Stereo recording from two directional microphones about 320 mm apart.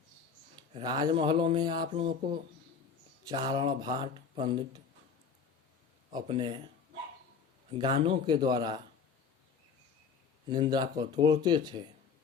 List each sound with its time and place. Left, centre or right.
0.5 s speech: centre
6.1 s speech: centre
7.7 s speech: centre
10.5 s speech: centre